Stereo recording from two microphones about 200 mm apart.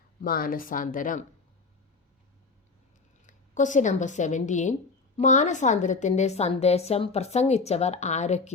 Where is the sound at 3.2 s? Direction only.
40° left (ahead or behind).